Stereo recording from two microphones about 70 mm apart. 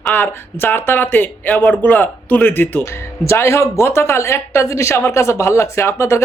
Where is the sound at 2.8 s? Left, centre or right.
Left.